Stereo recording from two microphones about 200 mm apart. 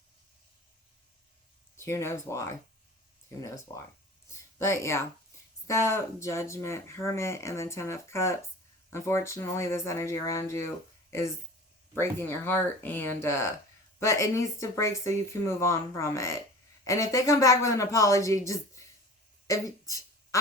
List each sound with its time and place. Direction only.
1.7 s speech: 15° left (ahead or behind)
4.3 s speech: 15° left (ahead or behind)
11.9 s speech: 10° left (ahead or behind)